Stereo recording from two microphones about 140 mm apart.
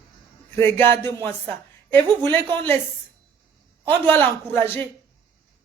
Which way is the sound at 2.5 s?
15° left (ahead or behind).